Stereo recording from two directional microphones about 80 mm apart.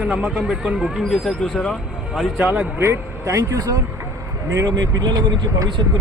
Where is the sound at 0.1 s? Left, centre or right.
Centre.